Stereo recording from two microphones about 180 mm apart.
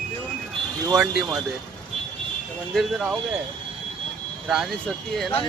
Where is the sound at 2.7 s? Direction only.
Centre (ahead or behind).